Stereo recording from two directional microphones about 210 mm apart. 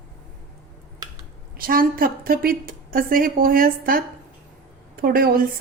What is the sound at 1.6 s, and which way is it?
A woman's voice, 45° right (ahead or behind).